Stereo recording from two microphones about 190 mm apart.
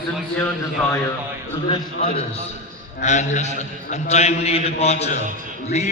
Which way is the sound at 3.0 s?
40° left (ahead or behind).